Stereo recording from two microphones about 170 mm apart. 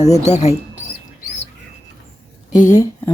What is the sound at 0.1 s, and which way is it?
Speech, 40° left (ahead or behind).